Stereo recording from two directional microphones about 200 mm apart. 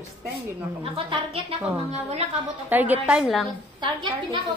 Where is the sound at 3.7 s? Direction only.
25° right (ahead or behind).